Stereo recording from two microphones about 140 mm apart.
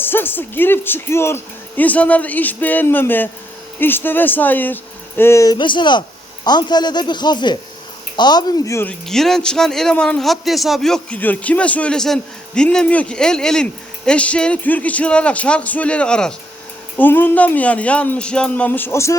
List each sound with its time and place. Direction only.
0.0 s a man's voice: 15° left (ahead or behind)
5.5 s speech: 35° left (ahead or behind)
8.9 s a man's voice: 5° left (ahead or behind); by 19.1 s 20° left (ahead or behind)